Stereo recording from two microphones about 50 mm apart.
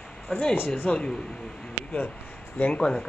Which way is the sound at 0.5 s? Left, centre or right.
Left.